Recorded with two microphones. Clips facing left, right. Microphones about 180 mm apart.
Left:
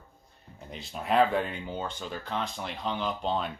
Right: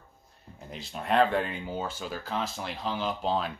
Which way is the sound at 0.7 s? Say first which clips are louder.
Even; centre (ahead or behind).